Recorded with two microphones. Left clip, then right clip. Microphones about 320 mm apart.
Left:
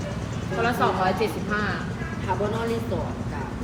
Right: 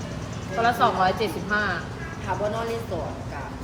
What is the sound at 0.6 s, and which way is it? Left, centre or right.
Speech, right.